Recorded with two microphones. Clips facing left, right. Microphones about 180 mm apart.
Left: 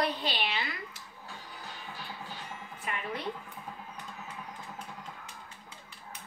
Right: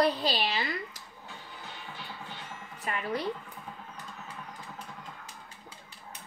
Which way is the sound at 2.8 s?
40° right (ahead or behind).